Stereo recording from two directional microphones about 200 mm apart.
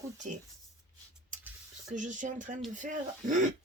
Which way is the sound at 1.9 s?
40° right (ahead or behind).